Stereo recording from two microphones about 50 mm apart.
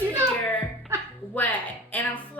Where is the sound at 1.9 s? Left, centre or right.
Left.